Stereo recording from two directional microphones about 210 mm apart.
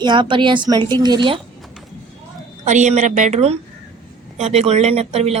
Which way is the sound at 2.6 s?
35° right (ahead or behind).